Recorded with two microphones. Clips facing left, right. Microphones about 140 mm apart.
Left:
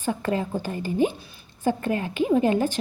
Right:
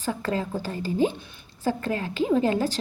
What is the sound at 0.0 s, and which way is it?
A woman's voice, 20° left (ahead or behind).